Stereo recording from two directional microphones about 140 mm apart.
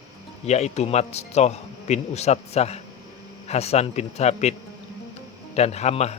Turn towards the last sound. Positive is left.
turn(degrees=50)  # may be behind; listen again after turning